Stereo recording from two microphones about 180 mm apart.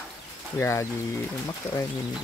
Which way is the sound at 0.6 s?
15° left (ahead or behind).